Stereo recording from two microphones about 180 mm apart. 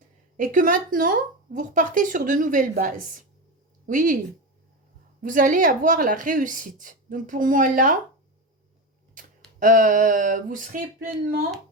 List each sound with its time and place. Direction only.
0.3 s a woman's voice: 45° right (ahead or behind)
5.2 s a woman's voice: 45° right (ahead or behind)
9.6 s a woman's voice: 45° right (ahead or behind)